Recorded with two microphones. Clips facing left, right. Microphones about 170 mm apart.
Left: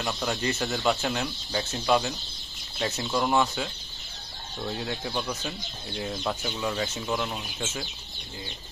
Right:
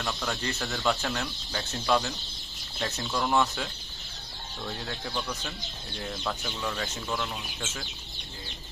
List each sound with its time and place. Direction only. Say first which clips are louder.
0.0 s speech: left 3 dB; 15° left (ahead or behind)